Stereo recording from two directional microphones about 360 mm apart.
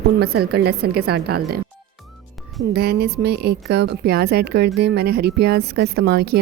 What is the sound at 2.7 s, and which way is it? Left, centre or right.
A woman's voice, right.